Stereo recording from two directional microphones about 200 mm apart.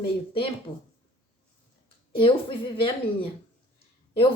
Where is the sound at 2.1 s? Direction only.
25° left (ahead or behind).